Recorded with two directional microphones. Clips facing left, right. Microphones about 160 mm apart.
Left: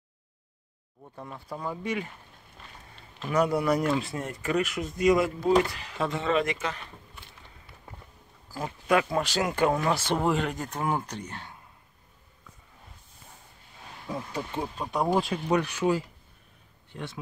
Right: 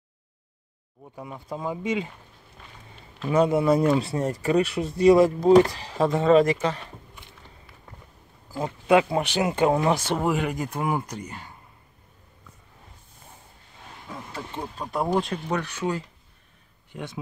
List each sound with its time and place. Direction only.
1.1 s speech: 10° right (ahead or behind)
3.3 s speech: 25° right (ahead or behind)
8.5 s speech: 25° right (ahead or behind)
10.0 s speech: 5° right (ahead or behind)
14.3 s speech: 10° left (ahead or behind)
14.8 s speech: centre (ahead or behind)
16.9 s speech: 15° right (ahead or behind)